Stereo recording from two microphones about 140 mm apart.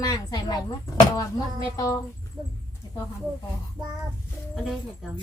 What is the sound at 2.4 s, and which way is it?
Speech, 30° right (ahead or behind).